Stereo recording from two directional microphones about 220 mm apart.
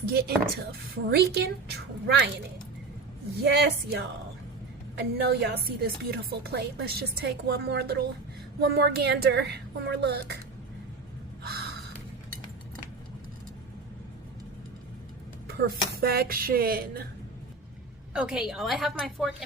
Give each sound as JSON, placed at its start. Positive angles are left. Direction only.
{"t": 0.1, "sound": "speech", "side_deg": -45}
{"t": 3.4, "sound": "speech", "side_deg": -45}
{"t": 5.2, "sound": "speech", "side_deg": -50}
{"t": 11.4, "sound": "gasp", "side_deg": -45}
{"t": 16.0, "sound": "speech", "side_deg": -45}
{"t": 18.1, "sound": "a woman's voice", "side_deg": -5}